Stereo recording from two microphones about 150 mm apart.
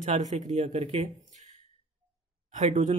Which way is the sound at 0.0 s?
50° right (ahead or behind).